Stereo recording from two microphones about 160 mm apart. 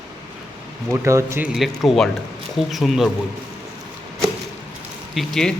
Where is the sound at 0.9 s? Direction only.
15° right (ahead or behind).